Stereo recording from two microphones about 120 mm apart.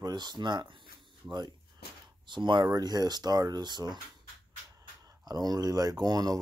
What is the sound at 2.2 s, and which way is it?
Speech, 40° right (ahead or behind).